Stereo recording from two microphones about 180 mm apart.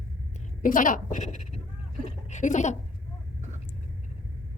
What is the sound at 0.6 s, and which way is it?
Speech, 45° left (ahead or behind).